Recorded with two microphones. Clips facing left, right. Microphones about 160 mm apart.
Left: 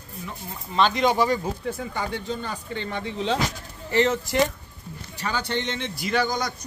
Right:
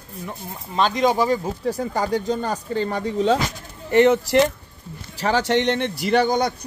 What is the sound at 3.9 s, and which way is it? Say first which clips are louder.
Speech: right 7 dB; 60° right (ahead or behind).